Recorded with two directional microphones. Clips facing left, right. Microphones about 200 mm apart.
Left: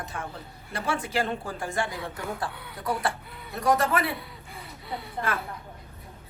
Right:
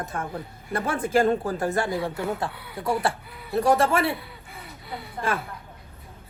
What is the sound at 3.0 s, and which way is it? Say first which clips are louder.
Speech: right 3 dB; 30° right (ahead or behind).